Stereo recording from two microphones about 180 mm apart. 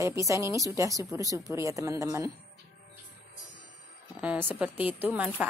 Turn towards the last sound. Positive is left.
turn(degrees=-10)  # may be behind; listen again after turning